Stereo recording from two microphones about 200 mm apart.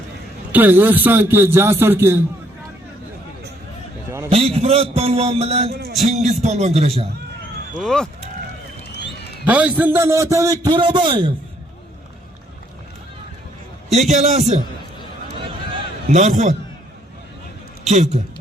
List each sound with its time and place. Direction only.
0.5 s a man's voice: 10° right (ahead or behind)
4.3 s a man's voice: 30° right (ahead or behind)
7.8 s speech: centre (ahead or behind)
9.5 s a man's voice: 5° right (ahead or behind); by 11.3 s 25° right (ahead or behind)
13.9 s a man's voice: 35° right (ahead or behind)
16.0 s a man's voice: 35° right (ahead or behind)
17.8 s a man's voice: 35° right (ahead or behind)